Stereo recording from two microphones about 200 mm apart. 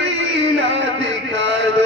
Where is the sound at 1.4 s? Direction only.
65° right (ahead or behind).